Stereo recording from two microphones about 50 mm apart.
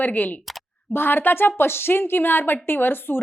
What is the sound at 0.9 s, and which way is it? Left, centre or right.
A woman's voice, left.